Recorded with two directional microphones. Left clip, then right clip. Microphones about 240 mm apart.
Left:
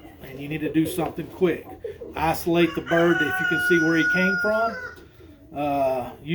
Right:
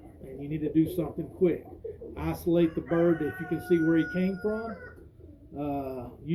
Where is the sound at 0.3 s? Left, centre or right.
Left.